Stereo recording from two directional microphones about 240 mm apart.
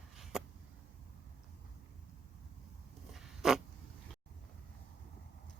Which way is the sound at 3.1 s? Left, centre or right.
Centre.